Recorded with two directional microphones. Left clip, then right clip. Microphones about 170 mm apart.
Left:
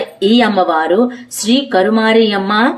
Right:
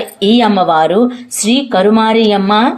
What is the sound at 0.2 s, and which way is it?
Speech, 20° right (ahead or behind).